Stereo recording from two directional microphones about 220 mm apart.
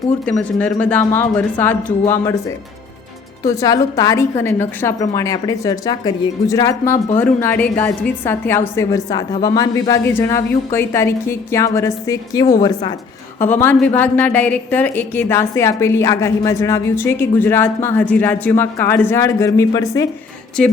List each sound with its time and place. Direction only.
0.3 s a woman's voice: 5° left (ahead or behind)
3.4 s a woman's voice: 15° left (ahead or behind)